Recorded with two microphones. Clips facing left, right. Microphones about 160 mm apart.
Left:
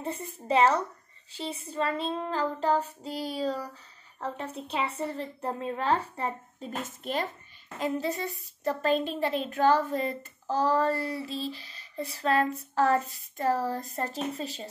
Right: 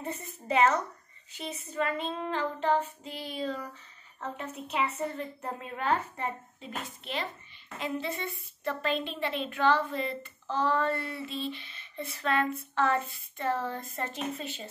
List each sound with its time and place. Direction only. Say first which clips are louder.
0.0 s a woman's voice: left 3 dB; 30° left (ahead or behind)